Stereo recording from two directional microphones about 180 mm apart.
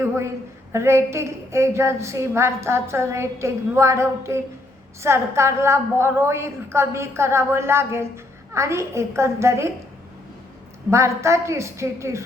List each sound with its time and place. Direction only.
0.7 s a woman's voice: 15° right (ahead or behind)
10.9 s a woman's voice: 15° right (ahead or behind)